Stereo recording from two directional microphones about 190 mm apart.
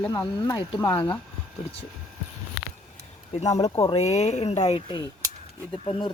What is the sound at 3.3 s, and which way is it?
Speech, 35° left (ahead or behind).